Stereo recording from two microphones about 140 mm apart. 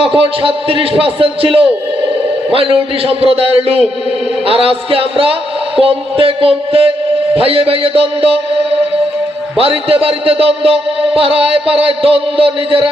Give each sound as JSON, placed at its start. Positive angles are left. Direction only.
{"t": 0.0, "sound": "a man's voice", "side_deg": -40}
{"t": 9.6, "sound": "a man's voice", "side_deg": -45}